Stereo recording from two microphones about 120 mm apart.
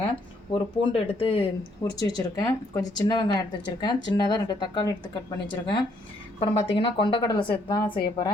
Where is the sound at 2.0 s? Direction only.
30° left (ahead or behind).